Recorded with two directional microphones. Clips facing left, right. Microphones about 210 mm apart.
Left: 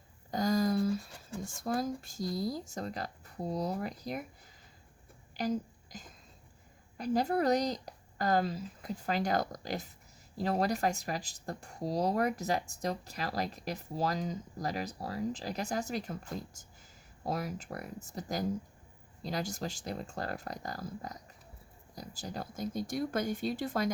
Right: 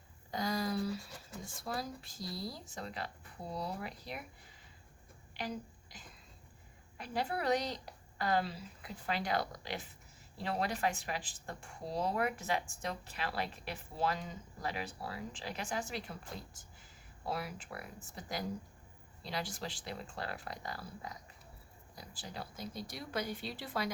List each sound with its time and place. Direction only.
0.3 s a sound: 45° left (ahead or behind)
1.5 s a woman's voice: 45° left (ahead or behind)
5.3 s a woman's voice: 40° left (ahead or behind)